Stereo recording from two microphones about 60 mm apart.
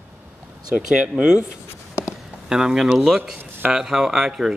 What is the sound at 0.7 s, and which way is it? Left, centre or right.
Speech, centre.